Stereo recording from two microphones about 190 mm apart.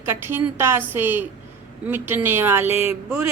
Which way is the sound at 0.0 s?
10° right (ahead or behind).